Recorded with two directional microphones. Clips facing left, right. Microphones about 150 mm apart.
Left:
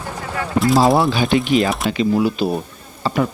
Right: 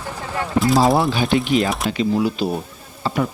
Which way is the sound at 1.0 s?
90° left.